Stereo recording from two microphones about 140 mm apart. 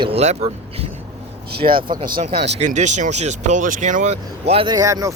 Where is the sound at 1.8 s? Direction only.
30° right (ahead or behind).